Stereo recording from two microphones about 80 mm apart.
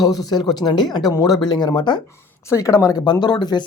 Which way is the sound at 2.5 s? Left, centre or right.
Left.